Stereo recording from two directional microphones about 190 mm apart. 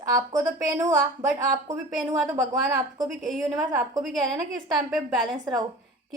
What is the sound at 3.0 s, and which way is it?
A woman's voice, centre (ahead or behind).